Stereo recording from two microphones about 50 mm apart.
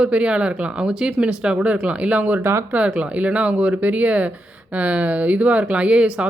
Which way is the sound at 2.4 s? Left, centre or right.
Right.